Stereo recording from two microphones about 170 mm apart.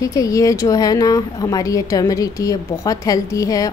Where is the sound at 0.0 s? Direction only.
20° left (ahead or behind).